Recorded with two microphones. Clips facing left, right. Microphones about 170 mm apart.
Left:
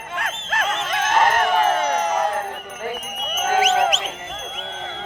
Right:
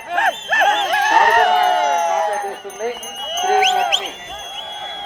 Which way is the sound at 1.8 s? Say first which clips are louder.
Right 4 dB; 60° right (ahead or behind).